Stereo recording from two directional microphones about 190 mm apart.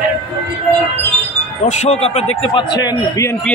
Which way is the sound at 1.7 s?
35° left (ahead or behind).